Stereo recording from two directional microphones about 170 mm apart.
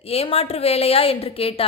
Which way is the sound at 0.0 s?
35° left (ahead or behind).